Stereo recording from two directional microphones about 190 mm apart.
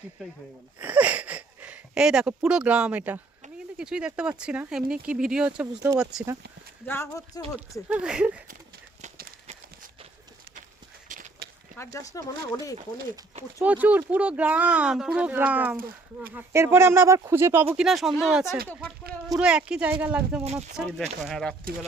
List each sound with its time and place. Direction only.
0.8 s a sound: 10° right (ahead or behind)
3.8 s speech: 5° right (ahead or behind)
6.8 s speech: 15° left (ahead or behind)
7.9 s speech: 5° right (ahead or behind)
9.0 s run: 40° right (ahead or behind)
11.1 s a sound: 45° right (ahead or behind)
11.8 s speech: 15° left (ahead or behind)
13.6 s speech: 10° right (ahead or behind)
17.7 s speech: centre (ahead or behind)
20.4 s speech: 35° right (ahead or behind)
21.2 s speech: centre (ahead or behind)